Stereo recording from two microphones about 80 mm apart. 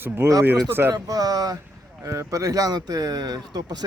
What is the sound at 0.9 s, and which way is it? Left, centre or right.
Speech, right.